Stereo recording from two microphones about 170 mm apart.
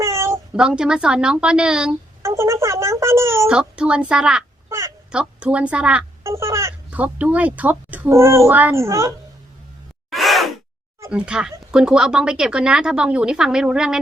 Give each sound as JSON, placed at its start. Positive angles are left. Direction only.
{"t": 0.0, "sound": "cat", "side_deg": -15}
{"t": 0.5, "sound": "speech", "side_deg": -5}
{"t": 2.2, "sound": "speech", "side_deg": -15}
{"t": 3.5, "sound": "speech", "side_deg": -5}
{"t": 10.1, "sound": "gasp", "side_deg": 0}
{"t": 11.1, "sound": "speech", "side_deg": -5}